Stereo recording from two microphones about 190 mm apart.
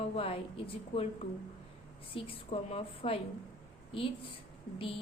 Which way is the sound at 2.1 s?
30° left (ahead or behind).